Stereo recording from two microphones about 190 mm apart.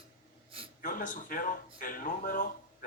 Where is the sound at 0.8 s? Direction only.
45° left (ahead or behind).